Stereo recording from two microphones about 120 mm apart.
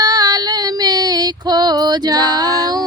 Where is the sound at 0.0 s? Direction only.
35° right (ahead or behind).